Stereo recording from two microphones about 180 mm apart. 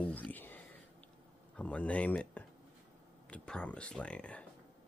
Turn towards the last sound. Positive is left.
turn(degrees=5)  # may be behind; listen again after turning